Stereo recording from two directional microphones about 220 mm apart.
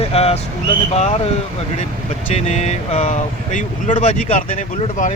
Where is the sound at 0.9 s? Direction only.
30° left (ahead or behind).